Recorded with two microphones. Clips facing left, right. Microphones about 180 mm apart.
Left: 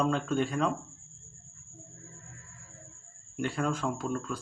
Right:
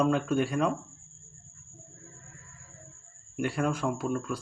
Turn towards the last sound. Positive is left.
turn(degrees=-10)  # may be behind; listen again after turning